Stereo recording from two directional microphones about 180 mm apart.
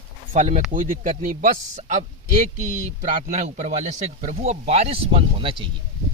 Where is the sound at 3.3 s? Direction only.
40° right (ahead or behind).